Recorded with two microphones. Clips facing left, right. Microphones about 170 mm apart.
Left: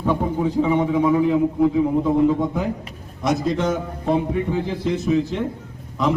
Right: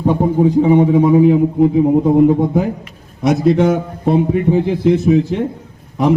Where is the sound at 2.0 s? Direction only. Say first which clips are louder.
Right 7 dB; 55° right (ahead or behind).